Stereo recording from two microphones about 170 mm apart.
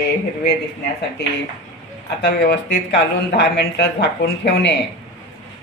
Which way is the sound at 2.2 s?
85° left.